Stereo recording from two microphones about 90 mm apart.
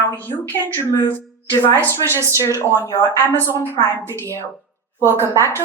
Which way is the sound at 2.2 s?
35° right (ahead or behind).